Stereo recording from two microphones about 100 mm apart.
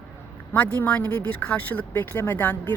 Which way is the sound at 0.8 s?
15° left (ahead or behind).